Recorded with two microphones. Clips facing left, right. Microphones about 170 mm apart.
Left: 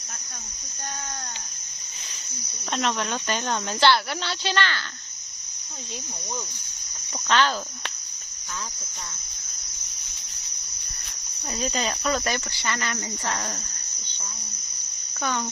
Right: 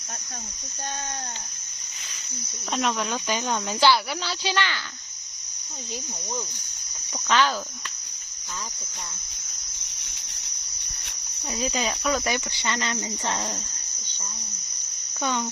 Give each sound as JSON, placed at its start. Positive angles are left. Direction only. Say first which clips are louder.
{"t": 2.7, "sound": "speech", "louder": "even", "side_deg": 0}
{"t": 7.3, "sound": "speech", "louder": "even", "side_deg": -5}
{"t": 11.5, "sound": "speech", "louder": "even", "side_deg": -5}
{"t": 12.2, "sound": "speech", "louder": "right 1 dB", "side_deg": -15}
{"t": 15.2, "sound": "speech", "louder": "right 1 dB", "side_deg": -15}